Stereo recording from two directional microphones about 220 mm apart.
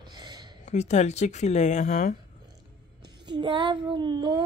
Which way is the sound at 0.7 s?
30° left (ahead or behind).